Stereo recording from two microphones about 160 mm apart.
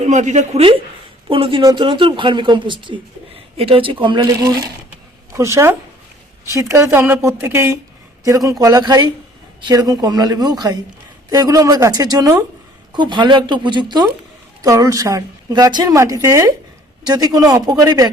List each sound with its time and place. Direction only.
0.0 s a woman's voice: 45° right (ahead or behind); by 18.1 s 25° right (ahead or behind)